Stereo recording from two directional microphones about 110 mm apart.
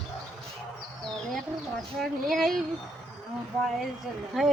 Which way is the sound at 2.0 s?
5° left (ahead or behind).